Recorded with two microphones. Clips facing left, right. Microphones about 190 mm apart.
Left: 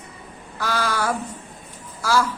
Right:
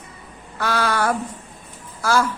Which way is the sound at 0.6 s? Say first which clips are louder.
Right 3 dB; 60° right (ahead or behind).